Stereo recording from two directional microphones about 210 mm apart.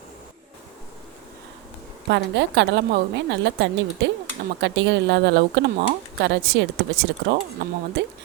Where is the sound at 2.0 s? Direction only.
55° right (ahead or behind).